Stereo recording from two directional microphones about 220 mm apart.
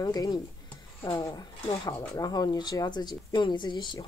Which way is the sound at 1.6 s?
15° left (ahead or behind).